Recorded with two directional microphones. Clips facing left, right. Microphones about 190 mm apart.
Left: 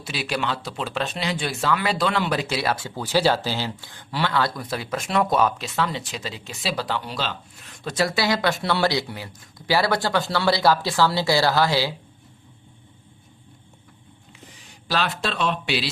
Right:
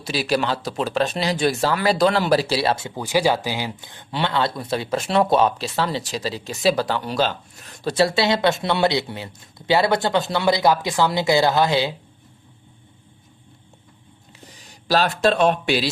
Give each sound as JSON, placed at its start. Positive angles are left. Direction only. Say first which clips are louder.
{"t": 0.0, "sound": "speech", "louder": "right 5 dB", "side_deg": -40}
{"t": 14.8, "sound": "speech", "louder": "right 7 dB", "side_deg": -40}